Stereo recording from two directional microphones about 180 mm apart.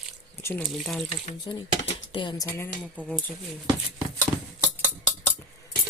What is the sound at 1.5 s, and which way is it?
Speech, 25° left (ahead or behind).